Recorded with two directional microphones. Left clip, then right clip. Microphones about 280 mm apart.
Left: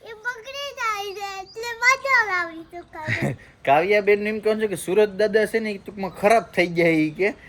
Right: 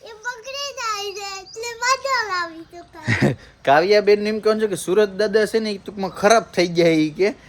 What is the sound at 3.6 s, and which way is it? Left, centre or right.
A man's voice, centre.